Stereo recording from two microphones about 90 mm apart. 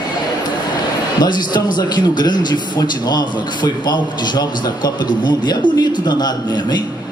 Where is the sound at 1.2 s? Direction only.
55° left (ahead or behind).